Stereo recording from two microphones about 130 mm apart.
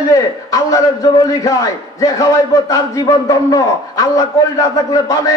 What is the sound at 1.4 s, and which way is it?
A man's voice, 25° left (ahead or behind).